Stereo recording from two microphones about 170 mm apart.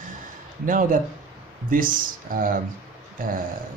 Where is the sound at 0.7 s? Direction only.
55° right (ahead or behind).